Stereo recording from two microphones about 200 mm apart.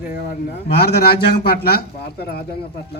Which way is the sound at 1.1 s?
50° left (ahead or behind).